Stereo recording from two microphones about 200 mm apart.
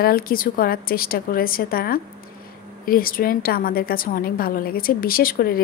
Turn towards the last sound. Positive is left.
turn(degrees=50)  # may be behind; listen again after turning